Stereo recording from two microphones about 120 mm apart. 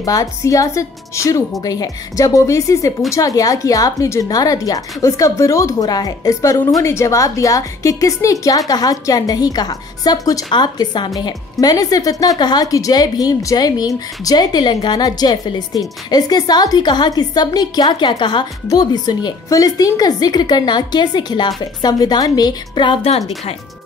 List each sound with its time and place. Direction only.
0.0 s a woman's voice: 30° left (ahead or behind)
23.0 s speech: 60° left (ahead or behind)